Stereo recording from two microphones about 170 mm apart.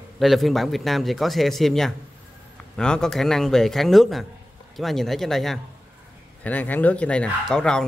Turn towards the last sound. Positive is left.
turn(degrees=5)  # may be behind; listen again after turning